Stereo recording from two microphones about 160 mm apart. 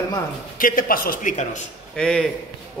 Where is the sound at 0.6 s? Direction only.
60° left (ahead or behind).